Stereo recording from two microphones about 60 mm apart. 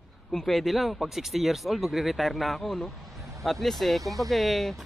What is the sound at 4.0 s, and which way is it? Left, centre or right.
Speech, right.